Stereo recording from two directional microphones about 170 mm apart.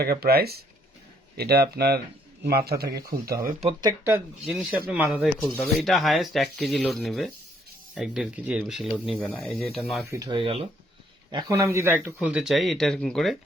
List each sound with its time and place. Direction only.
0.0 s speech: 65° right (ahead or behind)
3.6 s speech: 30° right (ahead or behind)
4.4 s speech: centre (ahead or behind)
10.1 s speech: 25° right (ahead or behind)
11.3 s speech: 20° right (ahead or behind); by 13.3 s 5° left (ahead or behind)